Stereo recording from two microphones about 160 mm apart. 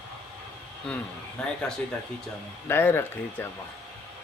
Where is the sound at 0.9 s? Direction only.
5° left (ahead or behind).